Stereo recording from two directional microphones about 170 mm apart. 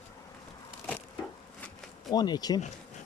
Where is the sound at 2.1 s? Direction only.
25° left (ahead or behind).